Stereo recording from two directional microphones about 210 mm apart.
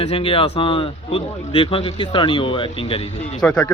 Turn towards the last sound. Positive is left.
turn(degrees=5)  # may be behind; listen again after turning